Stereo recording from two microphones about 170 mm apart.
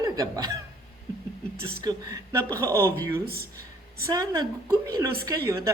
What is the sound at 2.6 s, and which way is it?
Speech, 15° right (ahead or behind).